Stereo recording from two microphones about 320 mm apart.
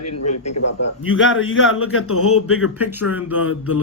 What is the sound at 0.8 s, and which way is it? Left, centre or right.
A man's voice, left.